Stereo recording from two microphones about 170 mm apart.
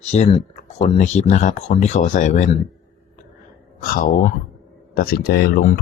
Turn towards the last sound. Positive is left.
turn(degrees=60)  # may be behind; listen again after turning